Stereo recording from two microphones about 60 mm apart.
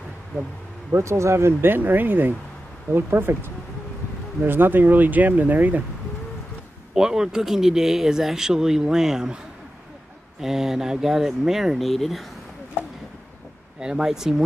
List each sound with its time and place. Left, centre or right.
0.9 s speech: right
7.0 s speech: centre
10.4 s speech: centre
13.7 s speech: centre